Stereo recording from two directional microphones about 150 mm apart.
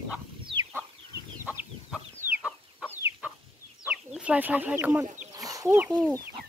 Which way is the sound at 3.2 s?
10° right (ahead or behind).